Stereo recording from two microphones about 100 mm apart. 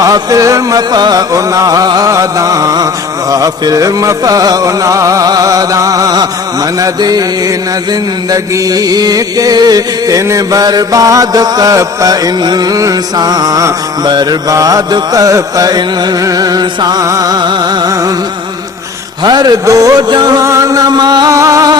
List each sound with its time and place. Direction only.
0.0 s music: 35° right (ahead or behind)
8.3 s music: 40° right (ahead or behind)
19.2 s a man's voice: 45° right (ahead or behind)
20.4 s music: 30° right (ahead or behind)
21.3 s music: 35° right (ahead or behind)